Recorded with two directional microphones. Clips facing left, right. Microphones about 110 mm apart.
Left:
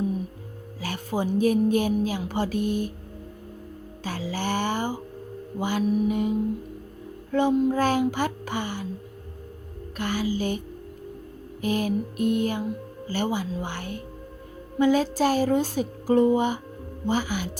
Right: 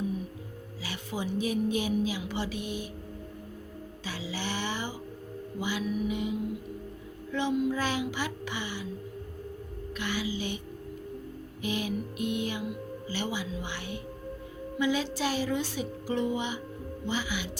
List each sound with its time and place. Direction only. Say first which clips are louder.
0.8 s speech: left 7 dB; 45° left (ahead or behind)
4.0 s speech: left 7 dB; 50° left (ahead or behind)
10.0 s speech: left 7 dB; 45° left (ahead or behind)
11.6 s speech: left 7 dB; 45° left (ahead or behind)